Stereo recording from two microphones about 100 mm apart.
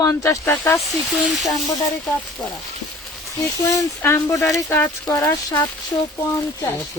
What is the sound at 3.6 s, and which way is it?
Speech, 30° left (ahead or behind).